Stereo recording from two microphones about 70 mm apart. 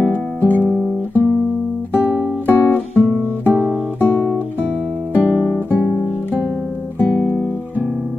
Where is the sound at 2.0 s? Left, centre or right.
Right.